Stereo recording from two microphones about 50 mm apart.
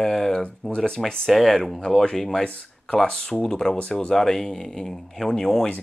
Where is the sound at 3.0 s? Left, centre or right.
Left.